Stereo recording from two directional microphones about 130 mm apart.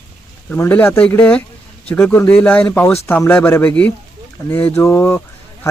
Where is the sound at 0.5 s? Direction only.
15° left (ahead or behind).